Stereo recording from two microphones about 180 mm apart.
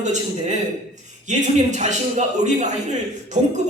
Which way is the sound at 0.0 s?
40° right (ahead or behind).